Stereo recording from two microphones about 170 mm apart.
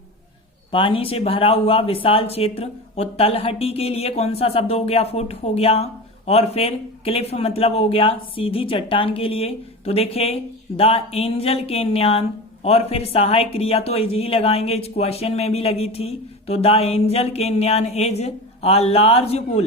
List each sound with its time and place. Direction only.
0.7 s speech: 30° left (ahead or behind)